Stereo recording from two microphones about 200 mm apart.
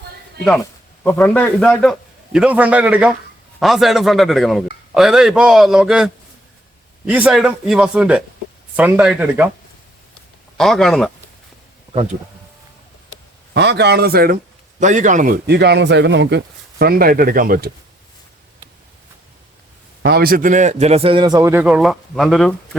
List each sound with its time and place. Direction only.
0.6 s a man's voice: 10° left (ahead or behind)
7.1 s a man's voice: 5° right (ahead or behind)
10.6 s a man's voice: centre (ahead or behind)
13.5 s speech: 55° right (ahead or behind)
14.8 s speech: 40° right (ahead or behind)
20.0 s a man's voice: 55° right (ahead or behind); by 22.8 s 5° left (ahead or behind)